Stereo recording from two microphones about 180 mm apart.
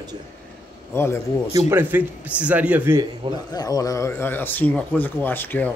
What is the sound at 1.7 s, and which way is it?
Speech, 10° right (ahead or behind).